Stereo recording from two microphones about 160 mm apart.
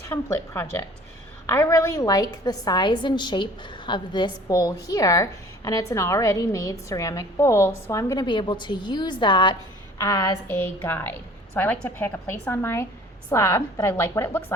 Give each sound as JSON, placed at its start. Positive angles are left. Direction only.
{"t": 0.1, "sound": "a woman's voice", "side_deg": 15}
{"t": 10.0, "sound": "a woman's voice", "side_deg": 20}